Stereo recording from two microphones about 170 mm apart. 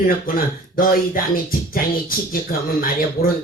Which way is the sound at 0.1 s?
60° left (ahead or behind).